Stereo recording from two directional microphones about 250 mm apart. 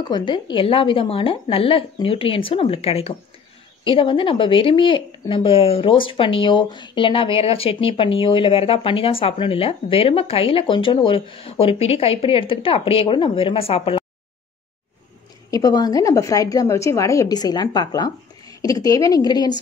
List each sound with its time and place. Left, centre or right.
0.0 s speech: centre
15.5 s a woman's voice: centre